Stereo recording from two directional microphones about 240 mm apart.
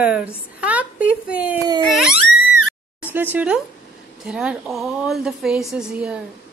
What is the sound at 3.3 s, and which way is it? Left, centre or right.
A woman's voice, centre.